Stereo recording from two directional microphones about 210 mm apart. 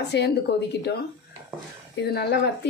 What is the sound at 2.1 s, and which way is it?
Speech, 50° left (ahead or behind).